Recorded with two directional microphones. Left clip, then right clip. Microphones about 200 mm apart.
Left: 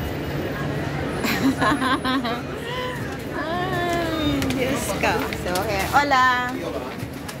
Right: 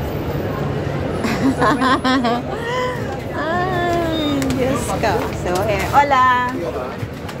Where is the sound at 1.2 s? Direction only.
5° right (ahead or behind).